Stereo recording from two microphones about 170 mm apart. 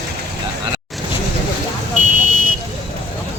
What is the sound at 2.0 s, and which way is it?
Buzzer, 50° right (ahead or behind).